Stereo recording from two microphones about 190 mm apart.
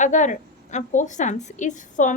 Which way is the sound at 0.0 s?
40° left (ahead or behind).